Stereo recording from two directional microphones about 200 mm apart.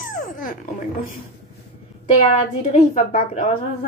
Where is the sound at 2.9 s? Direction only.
35° left (ahead or behind).